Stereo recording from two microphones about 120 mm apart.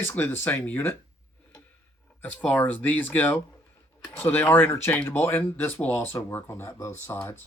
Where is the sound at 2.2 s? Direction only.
15° left (ahead or behind).